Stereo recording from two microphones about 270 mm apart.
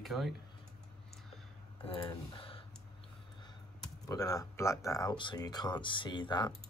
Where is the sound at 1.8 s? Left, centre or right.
Centre.